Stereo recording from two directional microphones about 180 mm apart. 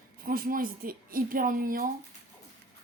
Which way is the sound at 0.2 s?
55° right (ahead or behind).